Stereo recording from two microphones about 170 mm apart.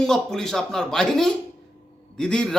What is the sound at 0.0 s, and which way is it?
Speech, centre (ahead or behind).